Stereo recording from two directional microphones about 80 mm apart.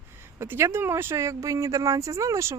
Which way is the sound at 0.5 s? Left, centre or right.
Right.